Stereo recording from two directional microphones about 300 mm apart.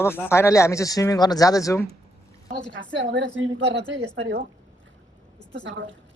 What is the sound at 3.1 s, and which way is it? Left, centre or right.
A woman's voice, right.